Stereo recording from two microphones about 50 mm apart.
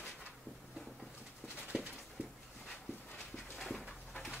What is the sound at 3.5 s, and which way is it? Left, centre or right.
Dog, centre.